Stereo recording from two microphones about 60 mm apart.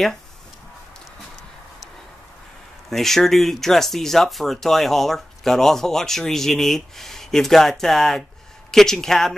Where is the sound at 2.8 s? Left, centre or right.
Centre.